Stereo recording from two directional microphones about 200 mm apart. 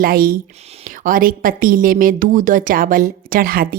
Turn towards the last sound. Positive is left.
turn(degrees=-45)  # may be behind; listen again after turning